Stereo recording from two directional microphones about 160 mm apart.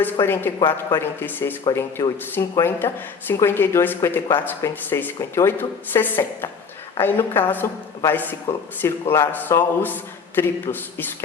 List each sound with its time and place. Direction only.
0.0 s speech: 15° left (ahead or behind)
1.6 s speech: 25° left (ahead or behind)